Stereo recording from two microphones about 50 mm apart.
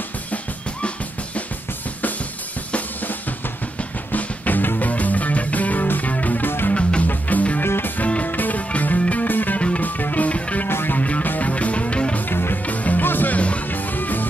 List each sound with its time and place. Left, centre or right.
2.7 s drum kit: left
4.1 s music: left
7.1 s music: left
7.6 s music: left
8.0 s music: left
9.6 s music: left
9.8 s music: left
10.7 s music: left
11.0 s music: left
12.3 s music: left
12.6 s music: left